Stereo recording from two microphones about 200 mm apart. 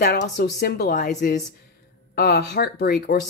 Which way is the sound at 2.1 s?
55° left (ahead or behind).